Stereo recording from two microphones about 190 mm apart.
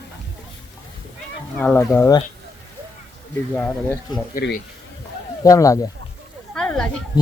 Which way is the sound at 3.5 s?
10° left (ahead or behind).